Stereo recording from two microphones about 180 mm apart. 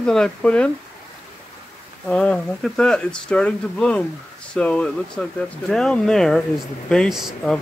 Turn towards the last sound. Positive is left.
turn(degrees=0)  # may be behind; listen again after turning